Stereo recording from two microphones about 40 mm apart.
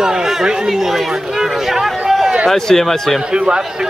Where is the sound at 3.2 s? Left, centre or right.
Right.